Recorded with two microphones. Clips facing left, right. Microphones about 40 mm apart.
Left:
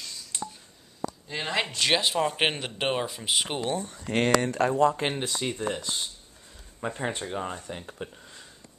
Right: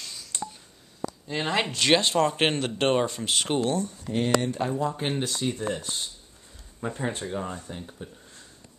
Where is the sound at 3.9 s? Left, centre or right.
Left.